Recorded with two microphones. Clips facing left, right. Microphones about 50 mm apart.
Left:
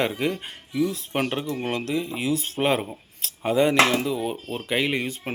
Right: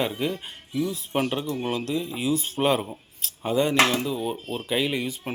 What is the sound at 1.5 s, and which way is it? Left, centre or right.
Speech, left.